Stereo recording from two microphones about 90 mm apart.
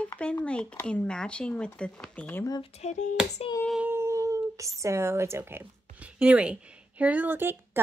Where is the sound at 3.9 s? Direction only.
30° right (ahead or behind).